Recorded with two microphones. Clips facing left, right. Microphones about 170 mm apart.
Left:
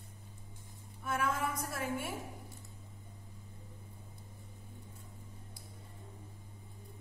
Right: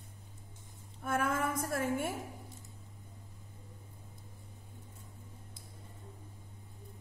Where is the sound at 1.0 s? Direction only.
50° right (ahead or behind).